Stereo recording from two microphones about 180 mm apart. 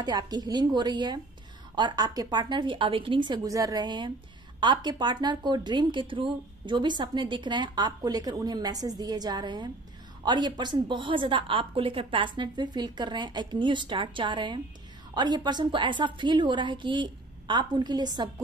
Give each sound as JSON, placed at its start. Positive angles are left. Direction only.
{"t": 0.0, "sound": "a woman's voice", "side_deg": -20}